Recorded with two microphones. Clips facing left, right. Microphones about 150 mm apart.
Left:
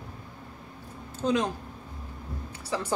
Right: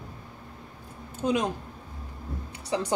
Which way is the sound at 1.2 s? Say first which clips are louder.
Even; 15° right (ahead or behind).